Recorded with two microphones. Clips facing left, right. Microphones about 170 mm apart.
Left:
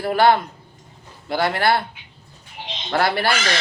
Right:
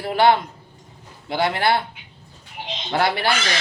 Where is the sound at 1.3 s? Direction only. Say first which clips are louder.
Left 1 dB; 20° right (ahead or behind).